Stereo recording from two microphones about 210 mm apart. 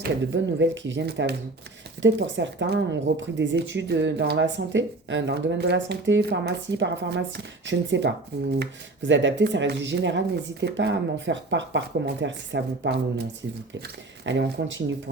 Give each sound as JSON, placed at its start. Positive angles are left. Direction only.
{"t": 0.6, "sound": "speech", "side_deg": -60}
{"t": 14.3, "sound": "speech", "side_deg": -60}